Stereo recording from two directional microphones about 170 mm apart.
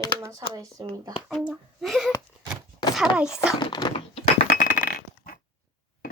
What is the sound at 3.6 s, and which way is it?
Speech, 25° left (ahead or behind).